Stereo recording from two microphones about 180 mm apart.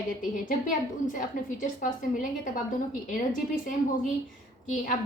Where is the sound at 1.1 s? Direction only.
45° left (ahead or behind).